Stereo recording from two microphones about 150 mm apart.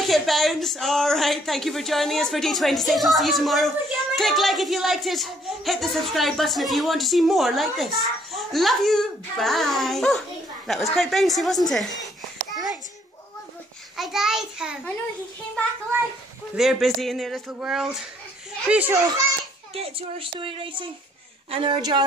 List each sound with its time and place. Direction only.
0.0 s speech: centre (ahead or behind)
11.7 s a sound: centre (ahead or behind)
13.9 s speech: centre (ahead or behind)
16.5 s a child's voice: centre (ahead or behind)
19.7 s a child's voice: 40° right (ahead or behind)